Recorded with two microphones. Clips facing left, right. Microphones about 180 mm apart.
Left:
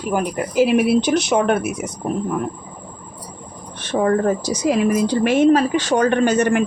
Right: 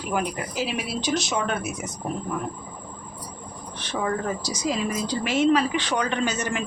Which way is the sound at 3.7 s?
50° left (ahead or behind).